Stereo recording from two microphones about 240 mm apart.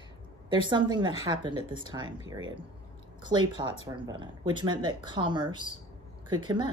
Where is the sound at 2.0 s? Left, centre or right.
Right.